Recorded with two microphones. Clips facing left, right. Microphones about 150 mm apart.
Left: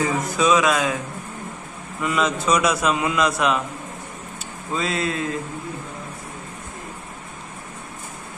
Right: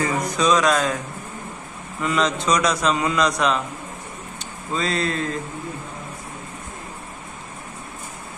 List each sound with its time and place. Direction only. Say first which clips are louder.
0.3 s a man's voice: even; 5° left (ahead or behind)
2.0 s a man's voice: even; 5° left (ahead or behind)
4.7 s a man's voice: right 1 dB; 5° left (ahead or behind)